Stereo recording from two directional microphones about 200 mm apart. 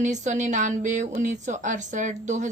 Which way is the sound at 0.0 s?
35° right (ahead or behind).